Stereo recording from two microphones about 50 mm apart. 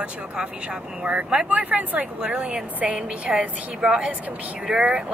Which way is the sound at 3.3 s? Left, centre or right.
Centre.